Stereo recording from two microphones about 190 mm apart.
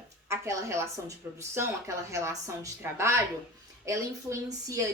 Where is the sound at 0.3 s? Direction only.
15° right (ahead or behind).